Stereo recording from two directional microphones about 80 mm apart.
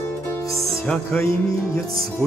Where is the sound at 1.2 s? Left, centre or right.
Left.